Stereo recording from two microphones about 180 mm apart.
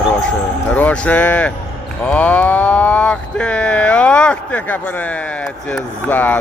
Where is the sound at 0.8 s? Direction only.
10° left (ahead or behind).